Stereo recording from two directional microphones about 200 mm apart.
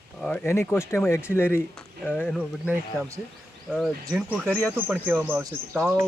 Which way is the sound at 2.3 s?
5° right (ahead or behind).